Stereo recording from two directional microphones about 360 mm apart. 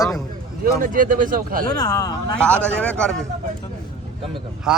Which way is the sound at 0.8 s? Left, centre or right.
Right.